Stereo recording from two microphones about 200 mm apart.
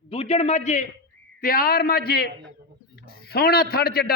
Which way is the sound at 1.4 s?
45° left (ahead or behind).